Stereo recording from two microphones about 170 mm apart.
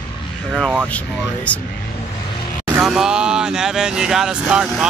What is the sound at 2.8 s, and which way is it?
Speech, 5° right (ahead or behind).